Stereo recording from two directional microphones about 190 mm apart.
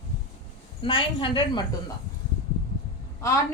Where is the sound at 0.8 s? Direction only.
25° left (ahead or behind).